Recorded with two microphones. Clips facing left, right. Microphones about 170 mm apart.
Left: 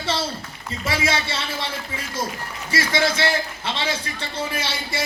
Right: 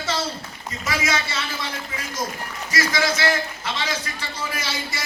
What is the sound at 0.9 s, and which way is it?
Speech, 30° left (ahead or behind).